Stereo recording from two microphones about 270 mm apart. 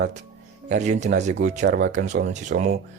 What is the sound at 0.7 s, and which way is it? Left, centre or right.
A man's voice, right.